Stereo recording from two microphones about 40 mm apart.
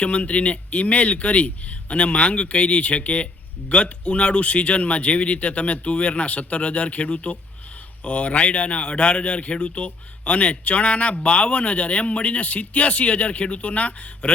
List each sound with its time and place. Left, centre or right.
0.0 s speech: left